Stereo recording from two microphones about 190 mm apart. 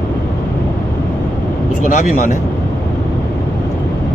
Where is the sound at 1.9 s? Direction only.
45° left (ahead or behind).